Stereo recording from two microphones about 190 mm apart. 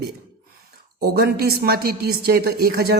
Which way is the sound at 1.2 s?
55° right (ahead or behind).